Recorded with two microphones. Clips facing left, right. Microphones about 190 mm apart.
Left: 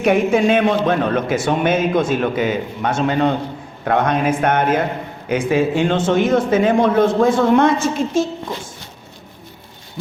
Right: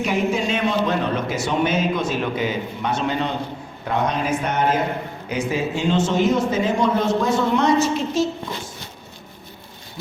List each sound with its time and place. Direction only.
0.0 s a man's voice: 60° left (ahead or behind)